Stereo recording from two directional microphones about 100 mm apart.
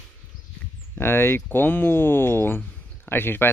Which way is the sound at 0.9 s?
20° left (ahead or behind).